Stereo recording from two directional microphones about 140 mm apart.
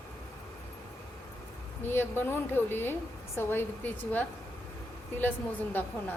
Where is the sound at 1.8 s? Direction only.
15° left (ahead or behind).